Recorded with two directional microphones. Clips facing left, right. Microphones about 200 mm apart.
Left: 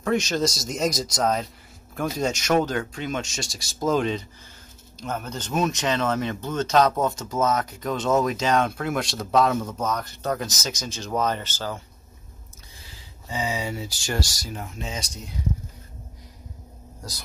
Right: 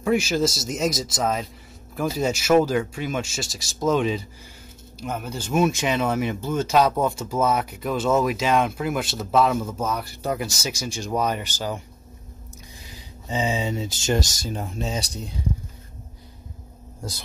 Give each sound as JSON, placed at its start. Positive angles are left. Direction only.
{"t": 0.0, "sound": "speech", "side_deg": -5}
{"t": 12.8, "sound": "speech", "side_deg": -20}